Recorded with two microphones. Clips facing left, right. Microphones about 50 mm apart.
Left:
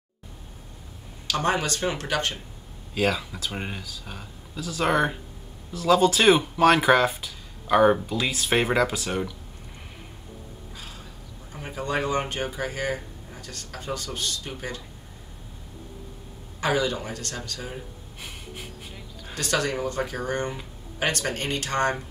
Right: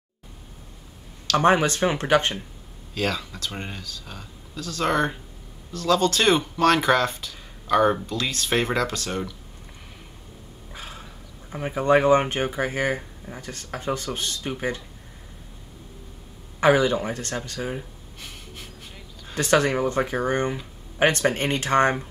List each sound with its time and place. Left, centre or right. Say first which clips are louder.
1.4 s speech: right 6 dB; right
2.9 s speech: left 2 dB; centre
10.7 s a sound: right 6 dB; right
11.5 s speech: right 9 dB; right
16.5 s speech: right 6 dB; right
18.2 s a sound: left 2 dB; centre
19.3 s speech: right 6 dB; right